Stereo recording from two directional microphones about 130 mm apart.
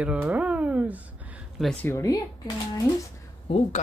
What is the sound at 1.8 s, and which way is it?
Speech, 25° left (ahead or behind).